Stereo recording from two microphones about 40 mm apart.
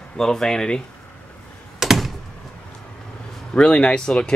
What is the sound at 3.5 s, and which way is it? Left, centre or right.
Speech, left.